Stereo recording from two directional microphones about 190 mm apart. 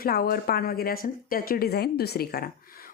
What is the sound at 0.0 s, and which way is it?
A woman's voice, 50° left (ahead or behind).